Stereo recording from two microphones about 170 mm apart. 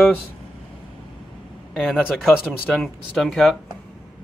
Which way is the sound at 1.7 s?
Centre (ahead or behind).